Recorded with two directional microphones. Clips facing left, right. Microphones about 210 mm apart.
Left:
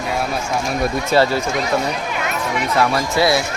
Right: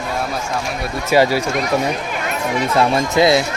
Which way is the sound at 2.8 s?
25° right (ahead or behind).